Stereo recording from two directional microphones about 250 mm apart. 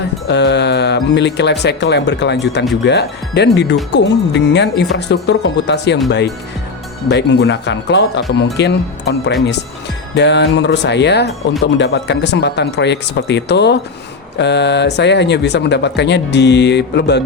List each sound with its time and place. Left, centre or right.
0.3 s speech: left